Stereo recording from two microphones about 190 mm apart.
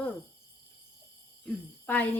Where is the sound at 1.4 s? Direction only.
10° left (ahead or behind).